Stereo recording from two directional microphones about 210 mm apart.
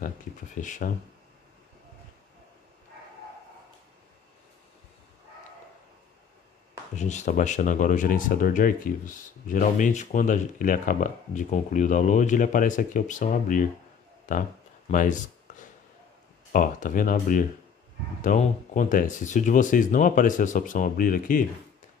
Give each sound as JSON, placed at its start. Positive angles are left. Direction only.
{"t": 0.6, "sound": "speech", "side_deg": 35}
{"t": 7.0, "sound": "speech", "side_deg": 35}
{"t": 16.5, "sound": "speech", "side_deg": 40}